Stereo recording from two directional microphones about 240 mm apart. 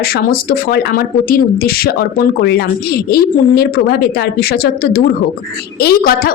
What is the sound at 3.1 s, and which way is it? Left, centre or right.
A woman's voice, left.